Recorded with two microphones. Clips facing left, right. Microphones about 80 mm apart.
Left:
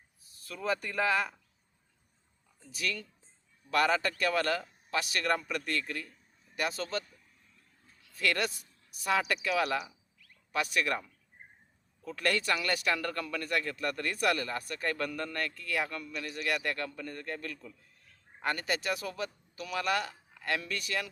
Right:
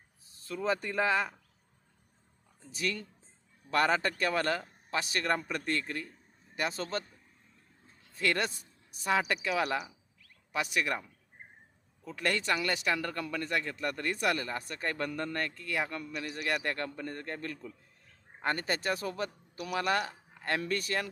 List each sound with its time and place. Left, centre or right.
0.4 s speech: right
2.6 s a man's voice: right
7.9 s a sound: right
9.2 s speech: centre
9.6 s speech: centre
10.5 s speech: centre
12.0 s a man's voice: centre; by 21.1 s right